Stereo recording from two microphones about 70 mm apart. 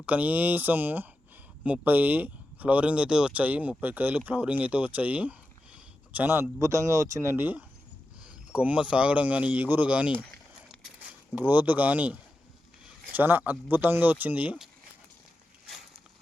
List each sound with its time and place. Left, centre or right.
0.0 s speech: right
6.2 s speech: right
6.6 s speech: right
8.2 s speech: centre
11.3 s speech: right